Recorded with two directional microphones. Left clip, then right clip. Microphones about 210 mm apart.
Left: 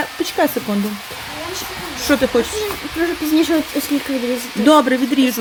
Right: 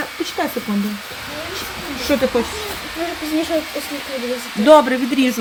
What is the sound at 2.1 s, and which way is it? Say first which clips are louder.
Speech: left 2 dB; 20° left (ahead or behind).